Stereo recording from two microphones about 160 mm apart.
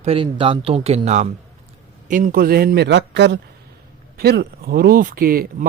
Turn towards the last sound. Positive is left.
turn(degrees=-65)  # may be behind; listen again after turning